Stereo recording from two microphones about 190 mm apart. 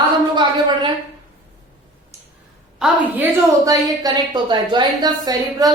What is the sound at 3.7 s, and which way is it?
A woman's voice, 20° right (ahead or behind).